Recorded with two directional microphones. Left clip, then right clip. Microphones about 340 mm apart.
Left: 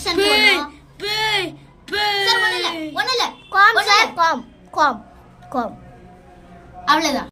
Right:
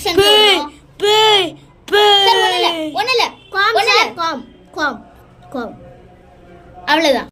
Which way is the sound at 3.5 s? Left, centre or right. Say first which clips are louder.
Left 5 dB; centre.